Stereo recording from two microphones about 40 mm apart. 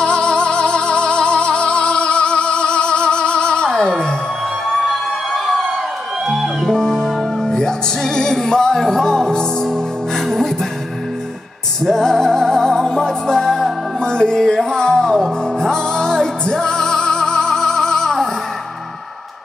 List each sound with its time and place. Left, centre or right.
0.0 s music: left
5.3 s a sound: centre
6.2 s music: centre
6.7 s music: centre
11.8 s music: centre